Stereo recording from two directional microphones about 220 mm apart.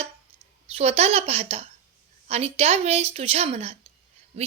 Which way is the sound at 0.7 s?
30° right (ahead or behind).